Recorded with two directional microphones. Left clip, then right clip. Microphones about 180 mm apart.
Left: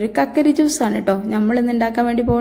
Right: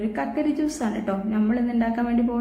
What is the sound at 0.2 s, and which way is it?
A woman's voice, 50° left (ahead or behind).